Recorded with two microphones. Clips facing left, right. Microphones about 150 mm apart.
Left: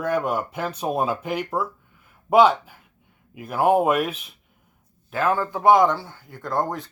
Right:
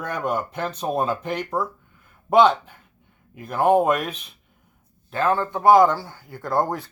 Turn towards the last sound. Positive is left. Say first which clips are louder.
# right 2 dB
turn(degrees=-10)  # may be behind; listen again after turning